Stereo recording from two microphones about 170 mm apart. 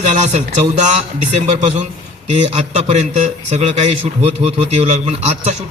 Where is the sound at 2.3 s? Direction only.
40° right (ahead or behind).